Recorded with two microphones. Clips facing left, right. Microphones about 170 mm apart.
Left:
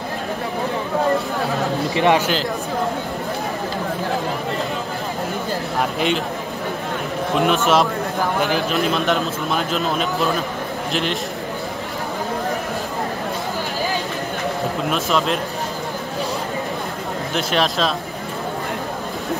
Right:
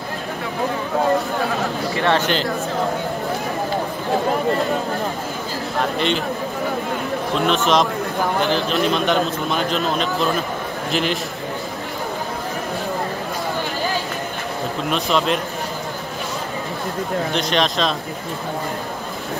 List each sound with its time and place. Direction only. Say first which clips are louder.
2.0 s speech: left 3 dB; 15° left (ahead or behind)
5.8 s speech: right 1 dB; 5° left (ahead or behind)
7.4 s a man's voice: even; 5° left (ahead or behind)
14.9 s a man's voice: right 2 dB; centre (ahead or behind)
17.3 s a man's voice: left 3 dB; 5° left (ahead or behind)